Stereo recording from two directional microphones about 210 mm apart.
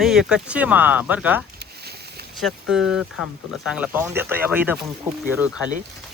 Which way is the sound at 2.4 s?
Centre (ahead or behind).